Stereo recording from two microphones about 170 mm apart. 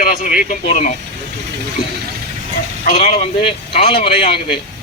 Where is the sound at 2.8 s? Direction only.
45° left (ahead or behind).